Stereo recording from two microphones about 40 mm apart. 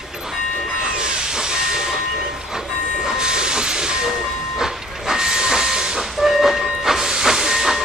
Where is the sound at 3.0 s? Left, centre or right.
Centre.